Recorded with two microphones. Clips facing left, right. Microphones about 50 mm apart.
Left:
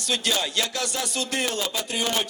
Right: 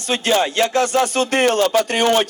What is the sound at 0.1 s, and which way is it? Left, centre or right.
Speech, right.